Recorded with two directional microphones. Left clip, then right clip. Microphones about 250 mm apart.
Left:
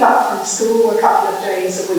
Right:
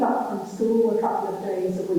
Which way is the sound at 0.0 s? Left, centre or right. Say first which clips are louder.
Left 12 dB; centre.